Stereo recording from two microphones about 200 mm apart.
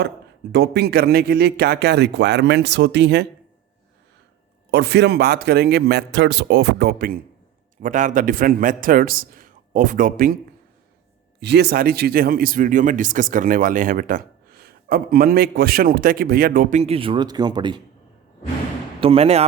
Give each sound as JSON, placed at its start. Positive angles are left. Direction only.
{"t": 0.5, "sound": "speech", "side_deg": -55}
{"t": 4.7, "sound": "speech", "side_deg": -55}
{"t": 11.3, "sound": "speech", "side_deg": -55}
{"t": 18.9, "sound": "speech", "side_deg": -30}